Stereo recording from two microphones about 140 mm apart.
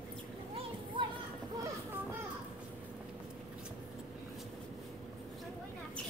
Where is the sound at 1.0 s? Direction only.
35° right (ahead or behind).